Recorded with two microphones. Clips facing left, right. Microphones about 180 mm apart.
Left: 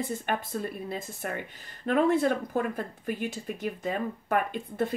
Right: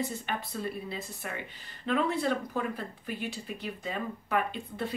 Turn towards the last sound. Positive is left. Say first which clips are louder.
# left 4 dB
turn(degrees=50)  # may be behind; listen again after turning